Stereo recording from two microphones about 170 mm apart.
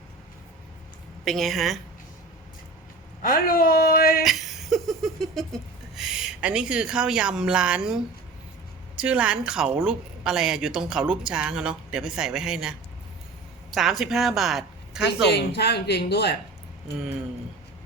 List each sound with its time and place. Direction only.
1.2 s speech: centre (ahead or behind)
3.2 s speech: 55° left (ahead or behind)
4.2 s a sound: centre (ahead or behind)
6.0 s speech: 5° right (ahead or behind)
9.0 s speech: 5° right (ahead or behind)
13.7 s a woman's voice: centre (ahead or behind)
15.3 s speech: 75° left (ahead or behind)